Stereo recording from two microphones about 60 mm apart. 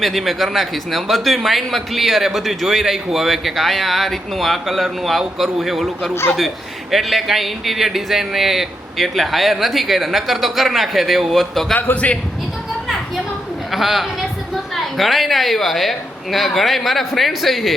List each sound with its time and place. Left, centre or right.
0.0 s a man's voice: centre
11.9 s a man's voice: left
13.7 s a woman's voice: centre